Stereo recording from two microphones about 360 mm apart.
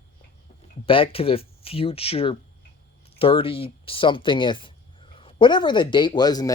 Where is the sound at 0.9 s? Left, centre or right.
Centre.